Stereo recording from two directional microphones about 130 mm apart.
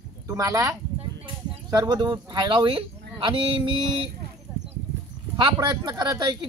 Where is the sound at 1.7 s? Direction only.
35° right (ahead or behind).